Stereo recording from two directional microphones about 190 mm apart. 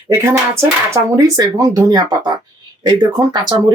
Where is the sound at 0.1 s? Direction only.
15° right (ahead or behind).